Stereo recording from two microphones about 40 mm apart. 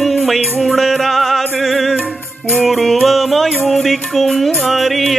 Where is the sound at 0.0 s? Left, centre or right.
Centre.